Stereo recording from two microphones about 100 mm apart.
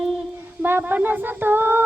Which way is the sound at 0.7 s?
20° right (ahead or behind).